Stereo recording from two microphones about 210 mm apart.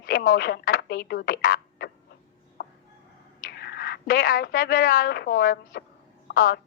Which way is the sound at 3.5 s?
50° left (ahead or behind).